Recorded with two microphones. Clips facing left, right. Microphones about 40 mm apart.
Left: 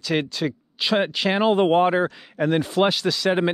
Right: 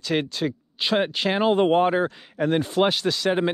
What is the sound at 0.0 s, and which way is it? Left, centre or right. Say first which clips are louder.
Speech: left 1 dB; left.